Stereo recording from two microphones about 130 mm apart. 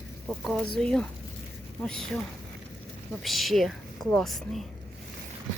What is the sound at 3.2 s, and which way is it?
Speech, centre (ahead or behind).